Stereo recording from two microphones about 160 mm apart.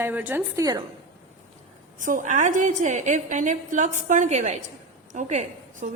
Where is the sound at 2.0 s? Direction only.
55° right (ahead or behind).